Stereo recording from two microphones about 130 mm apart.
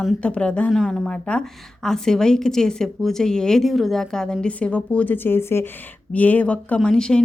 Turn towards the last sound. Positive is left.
turn(degrees=5)  # may be behind; listen again after turning